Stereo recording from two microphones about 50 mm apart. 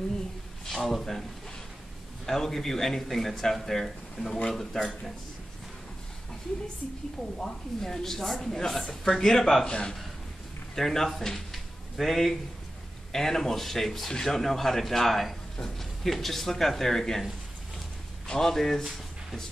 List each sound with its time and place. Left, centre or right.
0.7 s speech: centre
2.2 s speech: centre
7.3 s speech: centre
9.7 s a man's voice: centre